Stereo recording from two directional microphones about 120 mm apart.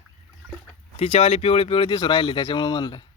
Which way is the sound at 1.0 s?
60° left (ahead or behind).